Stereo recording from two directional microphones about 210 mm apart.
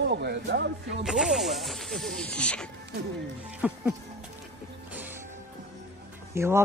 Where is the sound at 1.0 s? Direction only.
Centre (ahead or behind).